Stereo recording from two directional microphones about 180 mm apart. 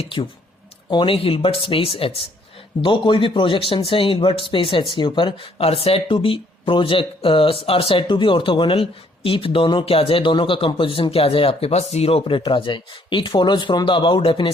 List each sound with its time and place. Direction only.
0.0 s speech: 30° left (ahead or behind)